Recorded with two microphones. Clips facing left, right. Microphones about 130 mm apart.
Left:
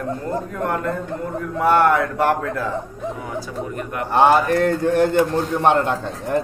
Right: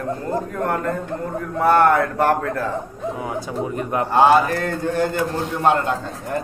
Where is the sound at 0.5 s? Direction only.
40° right (ahead or behind).